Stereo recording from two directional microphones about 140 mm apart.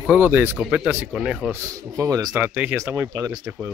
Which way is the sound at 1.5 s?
25° right (ahead or behind).